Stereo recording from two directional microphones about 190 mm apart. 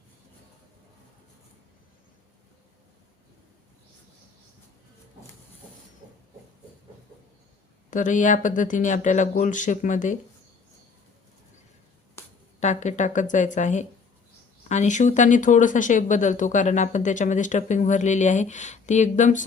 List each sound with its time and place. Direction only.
7.9 s speech: 40° left (ahead or behind)
12.5 s speech: 40° left (ahead or behind)